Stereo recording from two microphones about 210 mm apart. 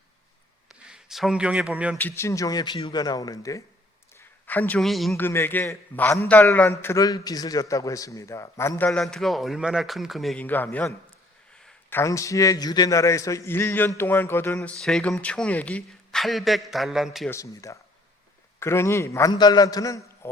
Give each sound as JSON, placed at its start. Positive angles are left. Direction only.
{"t": 0.7, "sound": "speech", "side_deg": -5}
{"t": 2.0, "sound": "a man's voice", "side_deg": 10}
{"t": 17.2, "sound": "a man's voice", "side_deg": 15}